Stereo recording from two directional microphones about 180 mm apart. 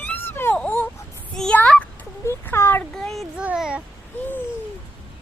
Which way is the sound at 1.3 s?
5° left (ahead or behind).